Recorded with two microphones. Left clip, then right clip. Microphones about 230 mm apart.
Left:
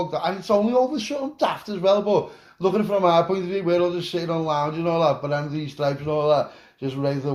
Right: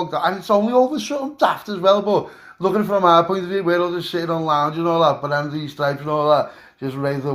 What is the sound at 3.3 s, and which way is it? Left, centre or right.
Mantra, centre.